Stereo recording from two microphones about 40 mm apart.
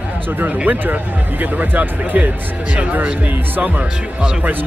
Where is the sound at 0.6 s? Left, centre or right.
Right.